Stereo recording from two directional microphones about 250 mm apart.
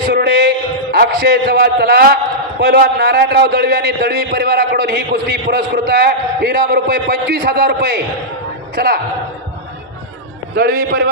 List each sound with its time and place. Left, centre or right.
0.0 s a man's voice: right
10.5 s a man's voice: right